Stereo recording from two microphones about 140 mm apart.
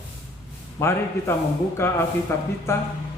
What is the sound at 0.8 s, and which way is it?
A man's voice, 20° left (ahead or behind).